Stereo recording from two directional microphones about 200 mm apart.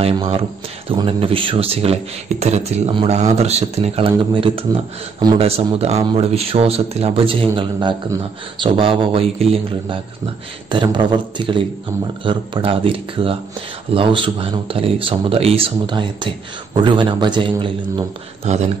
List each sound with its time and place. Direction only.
0.0 s speech: 30° right (ahead or behind)